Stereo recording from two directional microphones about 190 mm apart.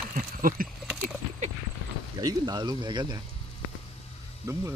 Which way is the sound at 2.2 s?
20° right (ahead or behind).